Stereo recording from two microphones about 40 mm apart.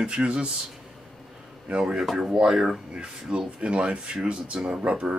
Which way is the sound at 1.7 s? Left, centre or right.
Right.